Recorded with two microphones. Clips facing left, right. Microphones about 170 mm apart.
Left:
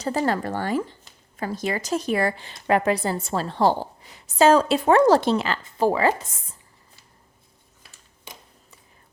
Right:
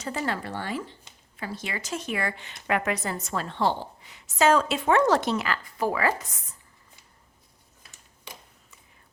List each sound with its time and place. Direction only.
0.0 s a woman's voice: 35° left (ahead or behind)